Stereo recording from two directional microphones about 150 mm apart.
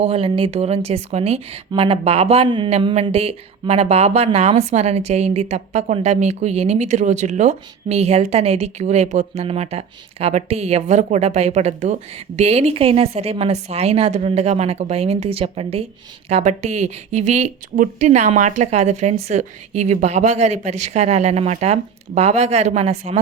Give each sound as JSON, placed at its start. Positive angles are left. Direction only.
{"t": 0.0, "sound": "speech", "side_deg": -40}
{"t": 16.3, "sound": "speech", "side_deg": -50}